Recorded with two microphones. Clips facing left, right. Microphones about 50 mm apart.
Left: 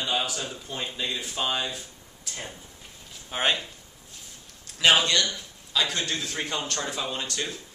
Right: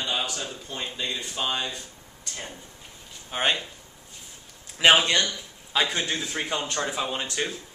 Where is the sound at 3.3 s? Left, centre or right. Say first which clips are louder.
Even; centre.